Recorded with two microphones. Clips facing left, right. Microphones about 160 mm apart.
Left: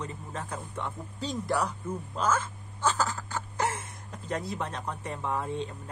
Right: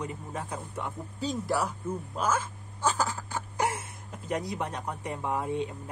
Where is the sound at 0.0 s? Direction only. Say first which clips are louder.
Right 2 dB; 15° right (ahead or behind).